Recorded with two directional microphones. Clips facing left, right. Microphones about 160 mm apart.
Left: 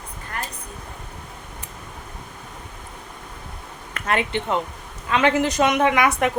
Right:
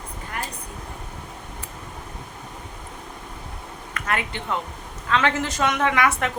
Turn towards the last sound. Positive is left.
turn(degrees=15)  # may be behind; listen again after turning